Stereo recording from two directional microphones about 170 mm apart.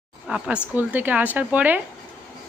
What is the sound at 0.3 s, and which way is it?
Speech, 5° right (ahead or behind).